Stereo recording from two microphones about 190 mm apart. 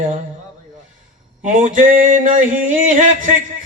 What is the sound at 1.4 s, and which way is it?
Music, 40° right (ahead or behind).